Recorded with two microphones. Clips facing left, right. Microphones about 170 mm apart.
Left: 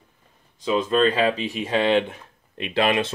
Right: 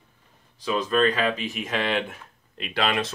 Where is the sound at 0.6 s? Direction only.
25° left (ahead or behind).